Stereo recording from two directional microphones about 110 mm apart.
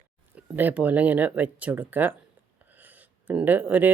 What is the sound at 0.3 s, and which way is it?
Speech, 15° right (ahead or behind).